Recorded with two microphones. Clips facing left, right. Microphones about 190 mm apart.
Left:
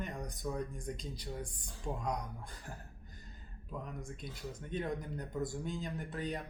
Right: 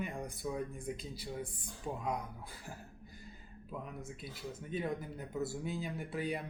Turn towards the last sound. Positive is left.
turn(degrees=-10)  # may be behind; listen again after turning